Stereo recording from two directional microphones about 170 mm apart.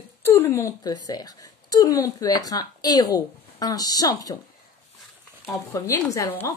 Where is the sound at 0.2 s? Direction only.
15° left (ahead or behind).